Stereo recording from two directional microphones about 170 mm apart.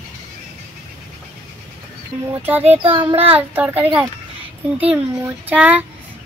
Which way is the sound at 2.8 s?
30° right (ahead or behind).